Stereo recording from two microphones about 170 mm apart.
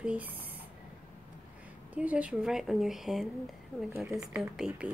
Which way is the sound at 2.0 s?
5° right (ahead or behind).